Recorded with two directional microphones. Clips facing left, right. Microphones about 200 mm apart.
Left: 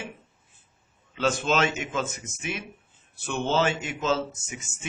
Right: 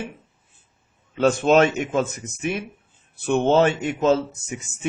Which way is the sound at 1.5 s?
50° right (ahead or behind).